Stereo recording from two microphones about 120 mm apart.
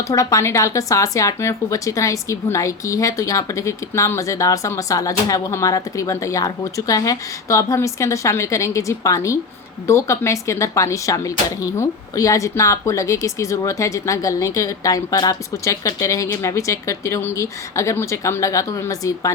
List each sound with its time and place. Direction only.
0.1 s speech: 25° left (ahead or behind)